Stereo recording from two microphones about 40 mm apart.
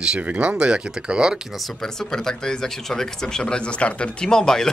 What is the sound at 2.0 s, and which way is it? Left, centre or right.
Speech, centre.